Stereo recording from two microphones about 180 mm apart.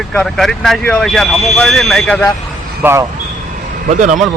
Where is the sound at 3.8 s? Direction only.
45° right (ahead or behind).